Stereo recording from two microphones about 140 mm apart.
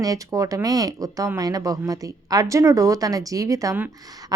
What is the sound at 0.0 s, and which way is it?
A woman's voice, 25° right (ahead or behind).